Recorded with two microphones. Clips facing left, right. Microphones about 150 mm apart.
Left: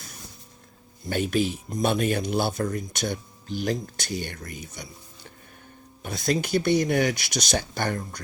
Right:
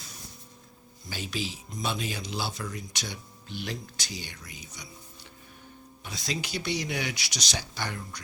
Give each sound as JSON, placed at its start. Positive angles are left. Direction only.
{"t": 1.1, "sound": "speech", "side_deg": 55}
{"t": 6.0, "sound": "speech", "side_deg": 55}